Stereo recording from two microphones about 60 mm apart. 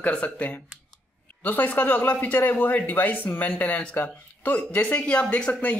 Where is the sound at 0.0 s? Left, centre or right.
Left.